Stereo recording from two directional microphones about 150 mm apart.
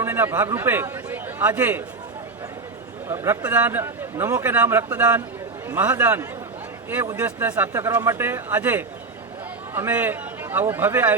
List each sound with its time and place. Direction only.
0.0 s a man's voice: 15° right (ahead or behind)
3.1 s a man's voice: 15° right (ahead or behind)